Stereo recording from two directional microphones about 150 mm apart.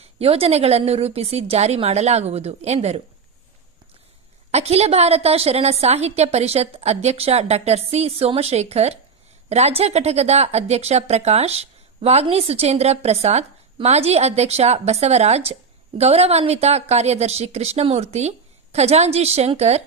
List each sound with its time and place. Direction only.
0.0 s speech: 40° right (ahead or behind)
4.5 s speech: 45° right (ahead or behind)